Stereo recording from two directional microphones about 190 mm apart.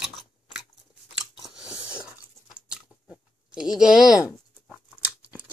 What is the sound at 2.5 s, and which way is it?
Dog, 5° right (ahead or behind).